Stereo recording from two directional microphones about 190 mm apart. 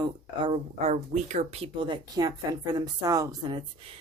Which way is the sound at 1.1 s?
40° right (ahead or behind).